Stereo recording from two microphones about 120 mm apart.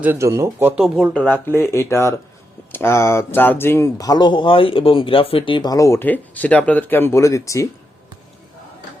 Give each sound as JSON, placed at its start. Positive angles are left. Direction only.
{"t": 0.0, "sound": "speech", "side_deg": -20}
{"t": 0.8, "sound": "speech", "side_deg": -10}
{"t": 1.1, "sound": "speech", "side_deg": 15}
{"t": 3.9, "sound": "speech", "side_deg": 30}
{"t": 5.7, "sound": "speech", "side_deg": 25}